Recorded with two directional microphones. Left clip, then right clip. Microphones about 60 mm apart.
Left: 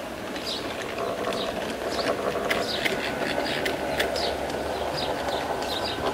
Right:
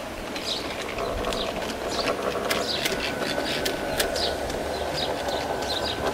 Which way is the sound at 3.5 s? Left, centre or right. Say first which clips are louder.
Even; right.